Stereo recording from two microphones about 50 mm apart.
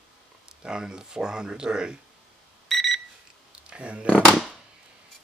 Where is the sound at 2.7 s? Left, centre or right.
Centre.